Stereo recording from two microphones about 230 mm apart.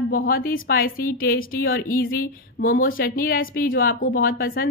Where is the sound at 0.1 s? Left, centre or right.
Left.